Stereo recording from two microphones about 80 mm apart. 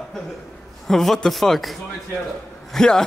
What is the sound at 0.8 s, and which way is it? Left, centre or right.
Speech, centre.